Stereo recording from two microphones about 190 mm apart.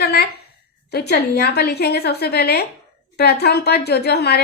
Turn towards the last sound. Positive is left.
turn(degrees=55)  # may be behind; listen again after turning